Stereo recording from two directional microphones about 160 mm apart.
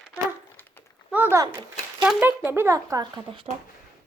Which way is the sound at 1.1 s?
15° right (ahead or behind).